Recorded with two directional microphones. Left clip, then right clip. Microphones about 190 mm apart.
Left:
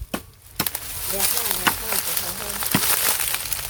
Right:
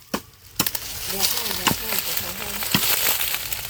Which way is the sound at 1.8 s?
5° left (ahead or behind).